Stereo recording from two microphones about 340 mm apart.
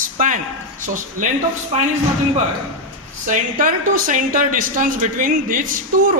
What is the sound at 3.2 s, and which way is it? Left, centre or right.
Speech, right.